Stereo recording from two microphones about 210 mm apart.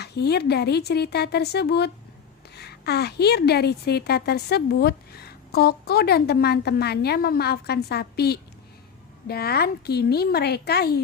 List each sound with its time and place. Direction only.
0.0 s a woman's voice: 50° left (ahead or behind)